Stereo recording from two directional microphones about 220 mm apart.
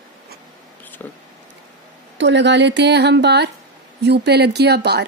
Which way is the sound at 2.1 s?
55° right (ahead or behind).